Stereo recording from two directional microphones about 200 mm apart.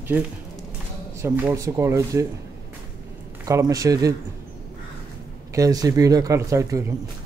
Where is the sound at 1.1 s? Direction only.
10° right (ahead or behind).